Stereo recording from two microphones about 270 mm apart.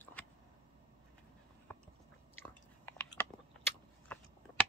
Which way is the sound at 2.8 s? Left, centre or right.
Centre.